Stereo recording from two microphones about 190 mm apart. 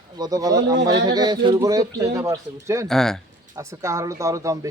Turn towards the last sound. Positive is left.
turn(degrees=-15)  # may be behind; listen again after turning